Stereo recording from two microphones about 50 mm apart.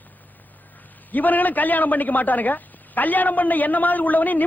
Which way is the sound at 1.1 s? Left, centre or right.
Left.